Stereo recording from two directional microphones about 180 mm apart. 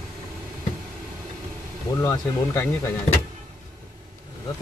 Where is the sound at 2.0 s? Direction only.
15° left (ahead or behind).